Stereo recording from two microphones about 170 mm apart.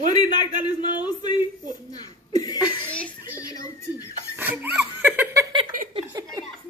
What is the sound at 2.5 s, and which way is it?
Chuckle, 10° right (ahead or behind).